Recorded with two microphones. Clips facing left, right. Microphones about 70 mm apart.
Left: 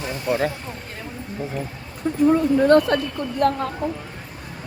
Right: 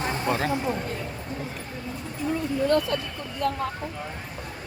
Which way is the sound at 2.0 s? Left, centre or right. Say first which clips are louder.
Left 12 dB; left.